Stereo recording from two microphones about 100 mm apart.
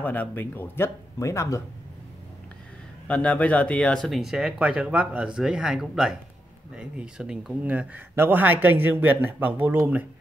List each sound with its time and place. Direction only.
0.0 s speech: 15° left (ahead or behind)
3.1 s speech: 15° left (ahead or behind); by 10.0 s 20° right (ahead or behind)